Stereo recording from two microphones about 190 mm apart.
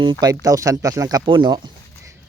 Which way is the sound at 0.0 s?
20° right (ahead or behind).